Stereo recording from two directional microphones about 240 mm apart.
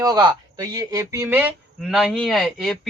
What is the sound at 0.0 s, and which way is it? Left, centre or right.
Speech, centre.